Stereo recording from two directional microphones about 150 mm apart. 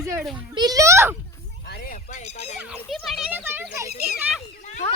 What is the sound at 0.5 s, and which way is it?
Speech, 25° right (ahead or behind).